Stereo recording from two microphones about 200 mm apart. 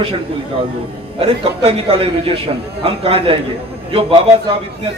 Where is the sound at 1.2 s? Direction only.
30° right (ahead or behind).